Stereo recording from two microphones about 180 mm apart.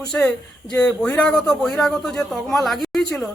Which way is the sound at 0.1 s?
5° left (ahead or behind).